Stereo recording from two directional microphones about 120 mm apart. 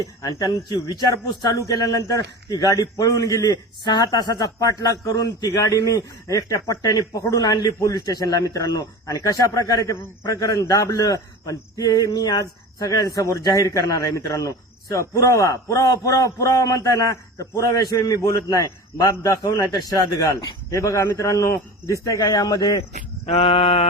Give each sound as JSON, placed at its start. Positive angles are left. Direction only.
{"t": 0.2, "sound": "a man's voice", "side_deg": 30}
{"t": 23.2, "sound": "male singing", "side_deg": 55}